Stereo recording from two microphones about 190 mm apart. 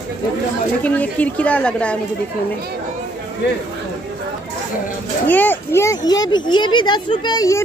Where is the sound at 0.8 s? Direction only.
10° left (ahead or behind).